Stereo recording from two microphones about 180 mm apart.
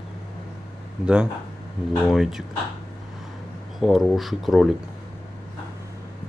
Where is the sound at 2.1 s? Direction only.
Centre (ahead or behind).